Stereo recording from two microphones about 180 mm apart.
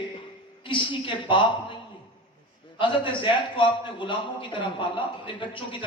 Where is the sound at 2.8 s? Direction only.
30° left (ahead or behind).